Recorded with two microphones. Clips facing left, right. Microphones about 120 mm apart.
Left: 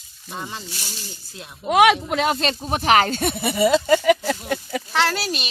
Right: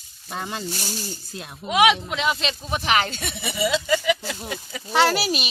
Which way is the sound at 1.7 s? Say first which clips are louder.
Left 3 dB; 55° left (ahead or behind).